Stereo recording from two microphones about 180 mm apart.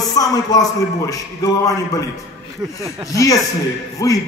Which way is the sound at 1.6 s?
20° left (ahead or behind).